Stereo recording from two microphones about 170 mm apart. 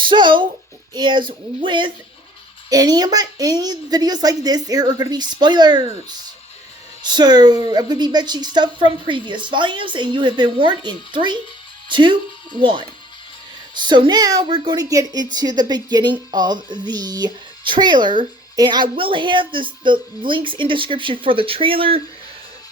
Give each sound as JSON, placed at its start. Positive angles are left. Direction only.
{"t": 0.0, "sound": "a child's voice", "side_deg": -30}
{"t": 0.9, "sound": "music", "side_deg": -30}
{"t": 7.0, "sound": "music", "side_deg": -25}
{"t": 11.9, "sound": "speech", "side_deg": -30}
{"t": 13.7, "sound": "music", "side_deg": -25}